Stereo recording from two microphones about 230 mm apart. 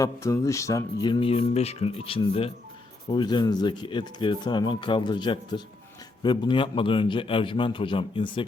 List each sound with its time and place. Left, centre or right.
0.0 s speech: centre